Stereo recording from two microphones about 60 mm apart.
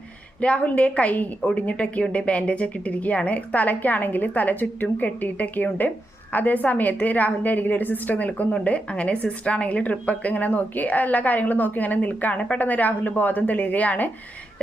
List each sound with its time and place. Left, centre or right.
0.3 s speech: left